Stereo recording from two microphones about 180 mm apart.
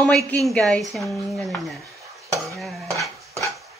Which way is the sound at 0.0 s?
5° left (ahead or behind).